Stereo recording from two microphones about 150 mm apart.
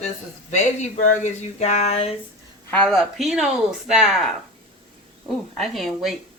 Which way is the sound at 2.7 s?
5° left (ahead or behind).